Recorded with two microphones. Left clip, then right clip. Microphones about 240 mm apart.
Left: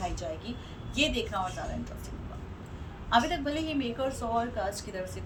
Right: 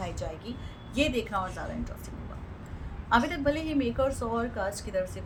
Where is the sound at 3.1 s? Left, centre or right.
Centre.